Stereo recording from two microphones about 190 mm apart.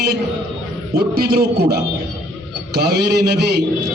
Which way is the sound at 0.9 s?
55° right (ahead or behind).